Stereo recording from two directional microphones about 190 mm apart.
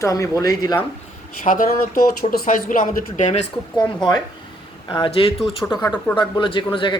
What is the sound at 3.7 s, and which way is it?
A man's voice, 25° left (ahead or behind).